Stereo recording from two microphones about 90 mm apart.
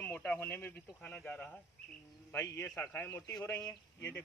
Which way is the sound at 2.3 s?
30° left (ahead or behind).